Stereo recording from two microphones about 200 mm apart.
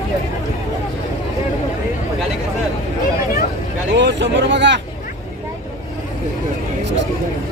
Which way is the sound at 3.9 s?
60° right (ahead or behind).